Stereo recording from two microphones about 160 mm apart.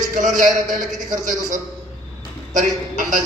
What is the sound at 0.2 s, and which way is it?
A man's voice, 55° right (ahead or behind).